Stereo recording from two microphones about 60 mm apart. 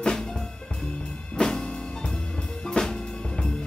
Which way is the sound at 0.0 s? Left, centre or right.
Centre.